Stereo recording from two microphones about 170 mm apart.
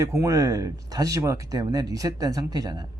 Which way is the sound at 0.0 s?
20° right (ahead or behind).